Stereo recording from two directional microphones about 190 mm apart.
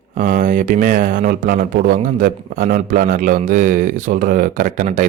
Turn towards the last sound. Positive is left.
turn(degrees=-45)  # may be behind; listen again after turning